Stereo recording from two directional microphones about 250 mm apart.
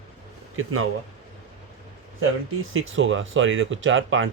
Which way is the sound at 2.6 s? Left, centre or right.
Right.